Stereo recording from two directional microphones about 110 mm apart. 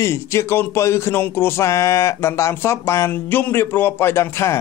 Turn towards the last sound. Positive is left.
turn(degrees=25)  # may be behind; listen again after turning